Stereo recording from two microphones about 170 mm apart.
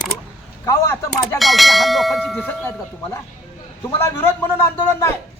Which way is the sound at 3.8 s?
15° left (ahead or behind).